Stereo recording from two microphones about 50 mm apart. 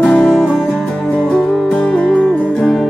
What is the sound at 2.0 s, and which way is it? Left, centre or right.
Music, centre.